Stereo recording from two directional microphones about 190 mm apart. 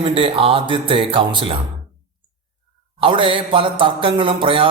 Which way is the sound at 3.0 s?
30° right (ahead or behind).